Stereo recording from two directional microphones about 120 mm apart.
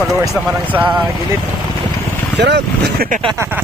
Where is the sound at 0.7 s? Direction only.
15° right (ahead or behind).